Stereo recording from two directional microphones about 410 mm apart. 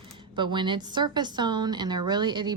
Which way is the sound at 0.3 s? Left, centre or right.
Centre.